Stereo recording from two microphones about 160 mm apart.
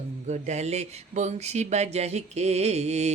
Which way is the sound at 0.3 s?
45° right (ahead or behind).